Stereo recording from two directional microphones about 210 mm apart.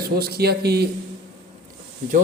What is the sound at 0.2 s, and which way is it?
Speech, 45° right (ahead or behind).